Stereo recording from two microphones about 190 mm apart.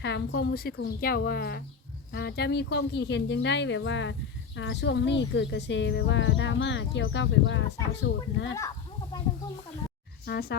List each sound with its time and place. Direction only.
0.0 s speech: 65° left (ahead or behind)
10.2 s speech: 60° left (ahead or behind)